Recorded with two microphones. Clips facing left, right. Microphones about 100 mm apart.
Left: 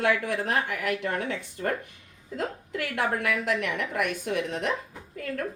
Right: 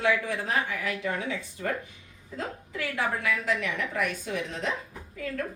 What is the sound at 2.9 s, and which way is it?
Speech, 65° left (ahead or behind).